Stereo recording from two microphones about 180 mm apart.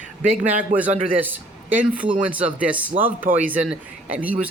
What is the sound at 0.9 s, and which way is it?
Speech, 30° right (ahead or behind).